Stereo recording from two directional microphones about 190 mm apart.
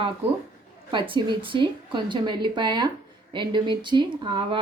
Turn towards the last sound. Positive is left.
turn(degrees=-25)  # may be behind; listen again after turning